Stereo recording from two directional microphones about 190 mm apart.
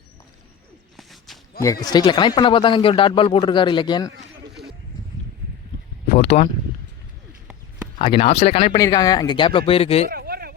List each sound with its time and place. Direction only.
0.9 s walk: centre (ahead or behind)
1.6 s speech: 20° left (ahead or behind)
6.3 s speech: 40° left (ahead or behind)
7.9 s speech: 30° left (ahead or behind)
10.1 s a sound: 55° right (ahead or behind)